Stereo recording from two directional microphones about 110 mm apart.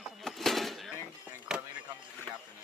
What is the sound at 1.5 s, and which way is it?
Chop, 5° right (ahead or behind).